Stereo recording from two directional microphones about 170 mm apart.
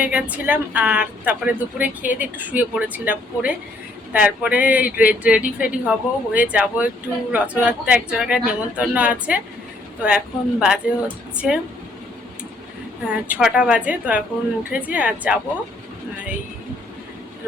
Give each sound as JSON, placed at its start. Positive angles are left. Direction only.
{"t": 0.0, "sound": "a woman's voice", "side_deg": -5}
{"t": 13.1, "sound": "speech", "side_deg": -5}